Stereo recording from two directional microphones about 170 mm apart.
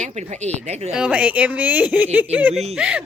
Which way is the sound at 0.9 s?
5° right (ahead or behind).